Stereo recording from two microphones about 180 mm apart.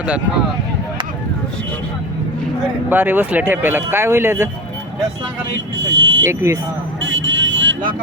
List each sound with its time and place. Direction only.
2.9 s speech: 10° right (ahead or behind)
5.8 s vehicle: 85° right
6.2 s speech: 15° right (ahead or behind)
7.0 s vehicle: 90° right